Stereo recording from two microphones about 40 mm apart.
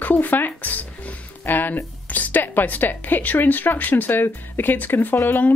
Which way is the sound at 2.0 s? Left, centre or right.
Left.